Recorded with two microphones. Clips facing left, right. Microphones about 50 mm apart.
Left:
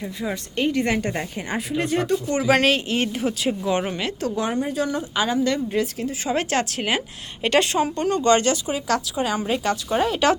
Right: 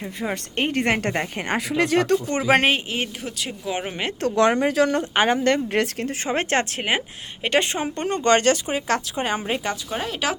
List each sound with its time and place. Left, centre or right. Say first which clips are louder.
0.2 s speech: even; right
1.5 s speech: right 3 dB; right
2.5 s speech: even; right
2.7 s speech: left 3 dB; centre
3.2 s speech: left 7 dB; centre
3.7 s speech: left 3 dB; centre
4.2 s speech: right 3 dB; right
4.6 s a woman's voice: right 5 dB; right
6.2 s speech: even; right
7.9 s speech: right 1 dB; right
9.4 s speech: left 3 dB; right
9.9 s speech: left 8 dB; centre